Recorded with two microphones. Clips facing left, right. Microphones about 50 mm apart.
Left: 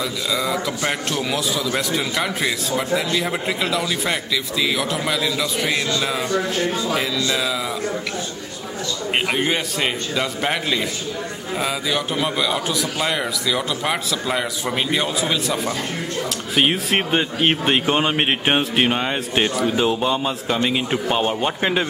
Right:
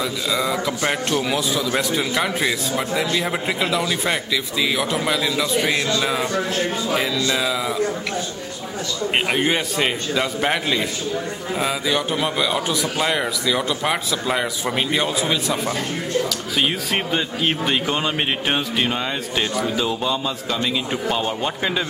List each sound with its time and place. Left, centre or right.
0.3 s a man's voice: centre
6.9 s a man's voice: centre
9.3 s a man's voice: centre
16.5 s speech: left